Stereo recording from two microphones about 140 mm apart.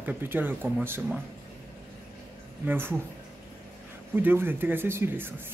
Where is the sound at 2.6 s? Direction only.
15° right (ahead or behind).